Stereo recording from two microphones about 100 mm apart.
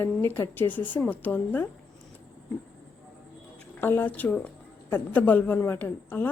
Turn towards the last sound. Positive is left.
turn(degrees=20)  # may be behind; listen again after turning